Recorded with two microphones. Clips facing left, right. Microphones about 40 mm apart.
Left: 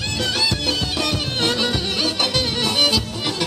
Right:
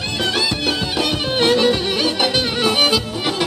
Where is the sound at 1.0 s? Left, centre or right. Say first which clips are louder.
Right 4 dB; centre.